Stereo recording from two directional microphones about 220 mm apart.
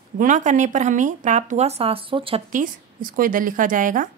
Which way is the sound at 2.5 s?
35° right (ahead or behind).